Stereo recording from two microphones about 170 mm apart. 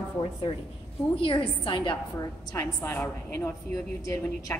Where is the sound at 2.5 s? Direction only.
15° left (ahead or behind).